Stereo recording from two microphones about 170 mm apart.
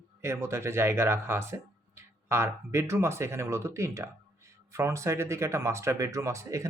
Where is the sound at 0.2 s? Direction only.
15° right (ahead or behind).